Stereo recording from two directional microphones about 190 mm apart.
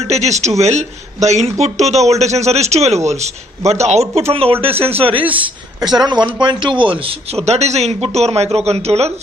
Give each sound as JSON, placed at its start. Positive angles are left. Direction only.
{"t": 0.0, "sound": "speech", "side_deg": -35}
{"t": 5.2, "sound": "a man's voice", "side_deg": -10}
{"t": 5.9, "sound": "speech", "side_deg": -25}